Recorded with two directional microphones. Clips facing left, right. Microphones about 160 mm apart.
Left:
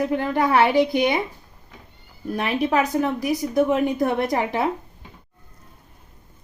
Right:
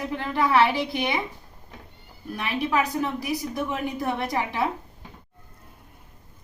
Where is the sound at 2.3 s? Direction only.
50° left (ahead or behind).